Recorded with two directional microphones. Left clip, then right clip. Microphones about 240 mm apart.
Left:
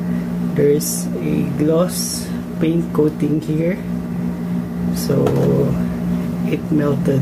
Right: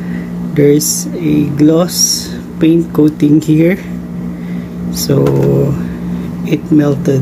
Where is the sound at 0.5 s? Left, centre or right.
Right.